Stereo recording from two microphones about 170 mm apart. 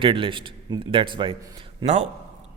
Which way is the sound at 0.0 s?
30° right (ahead or behind).